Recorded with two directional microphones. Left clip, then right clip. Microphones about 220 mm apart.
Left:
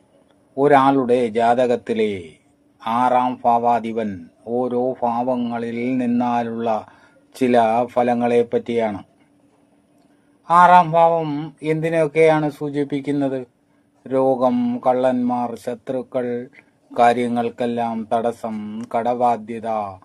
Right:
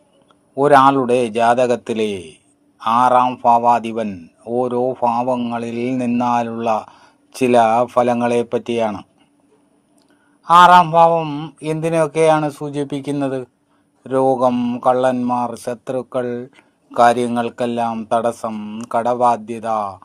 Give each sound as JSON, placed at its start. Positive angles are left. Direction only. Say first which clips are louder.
{"t": 0.5, "sound": "a man's voice", "louder": "right 3 dB", "side_deg": -25}
{"t": 10.4, "sound": "a man's voice", "louder": "right 3 dB", "side_deg": -25}